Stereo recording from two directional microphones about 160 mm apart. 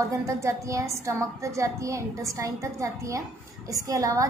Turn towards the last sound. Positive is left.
turn(degrees=-20)  # may be behind; listen again after turning